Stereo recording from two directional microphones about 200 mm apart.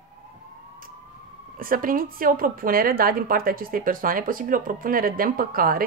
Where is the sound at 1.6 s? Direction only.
45° right (ahead or behind).